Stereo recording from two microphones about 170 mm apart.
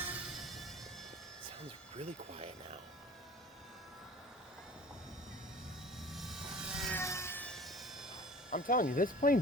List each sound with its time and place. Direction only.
0.0 s music: 5° right (ahead or behind)
2.0 s speech: 40° right (ahead or behind)
6.0 s vehicle: centre (ahead or behind)
6.9 s music: 15° left (ahead or behind); by 8.2 s 5° right (ahead or behind)
8.4 s speech: 55° left (ahead or behind)